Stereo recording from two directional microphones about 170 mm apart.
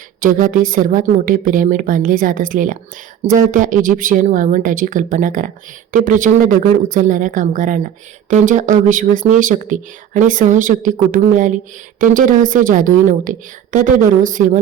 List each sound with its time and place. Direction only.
0.2 s a woman's voice: 50° right (ahead or behind)